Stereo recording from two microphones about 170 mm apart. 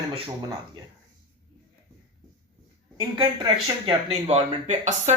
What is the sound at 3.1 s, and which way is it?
Speech, 25° right (ahead or behind).